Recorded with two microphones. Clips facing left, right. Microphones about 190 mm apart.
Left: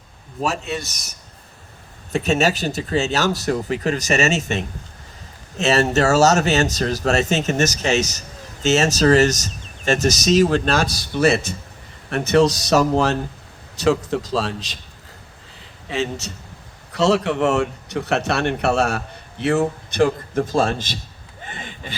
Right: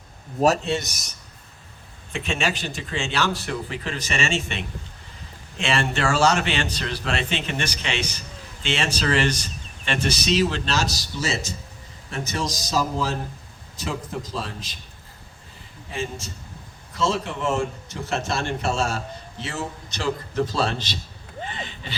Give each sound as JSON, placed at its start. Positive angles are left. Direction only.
{"t": 0.4, "sound": "a man's voice", "side_deg": -35}
{"t": 2.1, "sound": "speech", "side_deg": 40}
{"t": 15.9, "sound": "a man's voice", "side_deg": 75}
{"t": 21.4, "sound": "a sound", "side_deg": 50}